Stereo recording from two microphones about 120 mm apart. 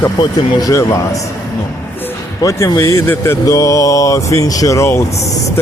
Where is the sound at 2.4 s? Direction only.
25° left (ahead or behind).